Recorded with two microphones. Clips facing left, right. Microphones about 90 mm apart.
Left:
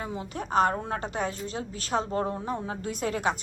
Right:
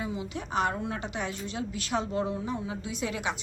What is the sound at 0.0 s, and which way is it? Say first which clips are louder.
A woman's voice: even; 45° left (ahead or behind).